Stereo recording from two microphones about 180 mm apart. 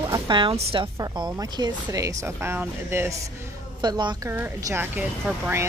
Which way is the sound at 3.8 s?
25° right (ahead or behind).